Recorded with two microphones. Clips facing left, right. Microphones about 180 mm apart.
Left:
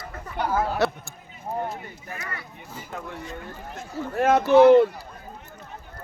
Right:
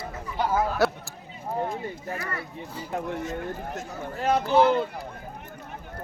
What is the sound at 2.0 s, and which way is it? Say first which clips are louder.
Speech: right 1 dB; 30° right (ahead or behind).